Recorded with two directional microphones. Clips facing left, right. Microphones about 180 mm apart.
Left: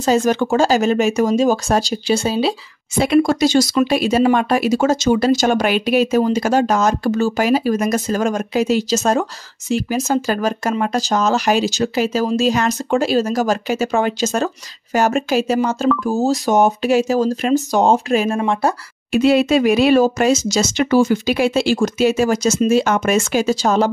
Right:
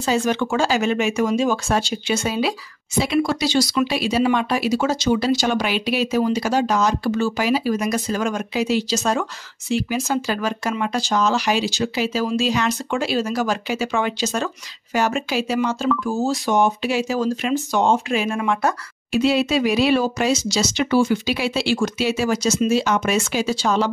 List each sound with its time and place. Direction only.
0.0 s speech: 40° left (ahead or behind)
3.0 s speech: 50° left (ahead or behind); by 18.8 s 30° left (ahead or behind)
19.1 s speech: 55° left (ahead or behind)